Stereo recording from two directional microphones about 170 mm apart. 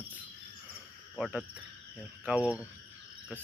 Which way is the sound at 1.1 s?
5° right (ahead or behind).